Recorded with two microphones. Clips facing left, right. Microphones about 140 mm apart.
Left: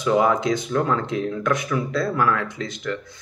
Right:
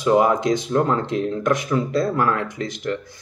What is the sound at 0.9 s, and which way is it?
Speech, 25° right (ahead or behind).